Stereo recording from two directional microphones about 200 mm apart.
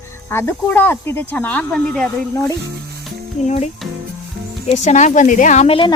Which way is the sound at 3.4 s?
35° left (ahead or behind).